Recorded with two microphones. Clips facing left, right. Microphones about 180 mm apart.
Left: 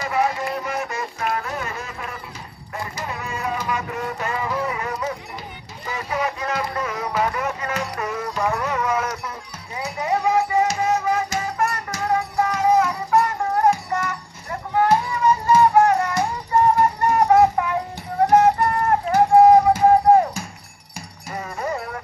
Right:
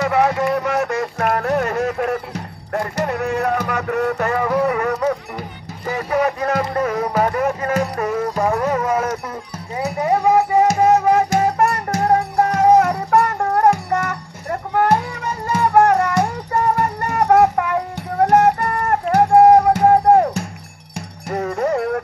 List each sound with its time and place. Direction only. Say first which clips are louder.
0.0 s music: right 6 dB; 70° right (ahead or behind)